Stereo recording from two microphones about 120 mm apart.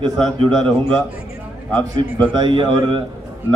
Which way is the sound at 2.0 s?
45° right (ahead or behind).